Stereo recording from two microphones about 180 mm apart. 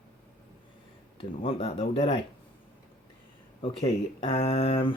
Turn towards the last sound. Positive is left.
turn(degrees=35)  # may be behind; listen again after turning